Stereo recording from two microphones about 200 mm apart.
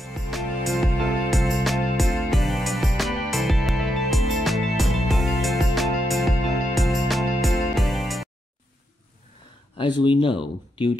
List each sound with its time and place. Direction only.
0.0 s music: centre (ahead or behind)
9.8 s speech: 25° left (ahead or behind)